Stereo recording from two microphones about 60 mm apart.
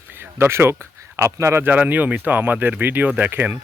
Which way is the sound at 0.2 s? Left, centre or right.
Right.